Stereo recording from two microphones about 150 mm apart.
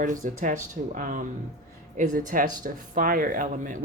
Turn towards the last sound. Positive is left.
turn(degrees=-60)  # may be behind; listen again after turning